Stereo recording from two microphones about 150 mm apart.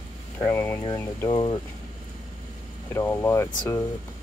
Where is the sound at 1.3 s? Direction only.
30° left (ahead or behind).